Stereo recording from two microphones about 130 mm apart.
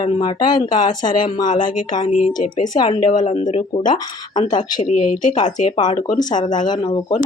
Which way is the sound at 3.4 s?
75° left (ahead or behind).